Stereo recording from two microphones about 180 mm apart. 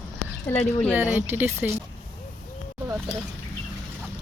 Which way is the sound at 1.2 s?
10° right (ahead or behind).